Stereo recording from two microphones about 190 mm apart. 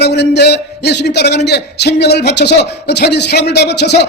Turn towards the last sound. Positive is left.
turn(degrees=65)  # may be behind; listen again after turning